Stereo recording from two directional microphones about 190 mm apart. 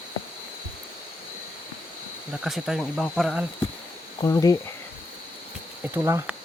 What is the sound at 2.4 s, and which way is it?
Speech, centre (ahead or behind).